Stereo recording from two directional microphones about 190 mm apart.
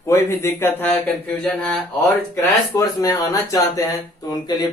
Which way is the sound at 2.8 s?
15° left (ahead or behind).